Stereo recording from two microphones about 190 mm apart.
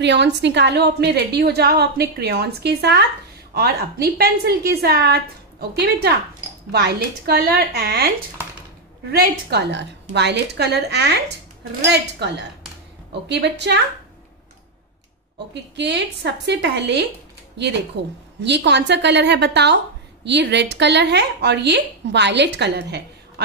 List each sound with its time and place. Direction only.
0.0 s a woman's voice: 65° right (ahead or behind)
9.1 s a woman's voice: 60° right (ahead or behind)
15.3 s a woman's voice: 65° right (ahead or behind)